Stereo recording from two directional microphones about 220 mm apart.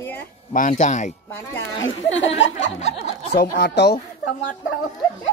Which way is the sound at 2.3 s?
55° left (ahead or behind).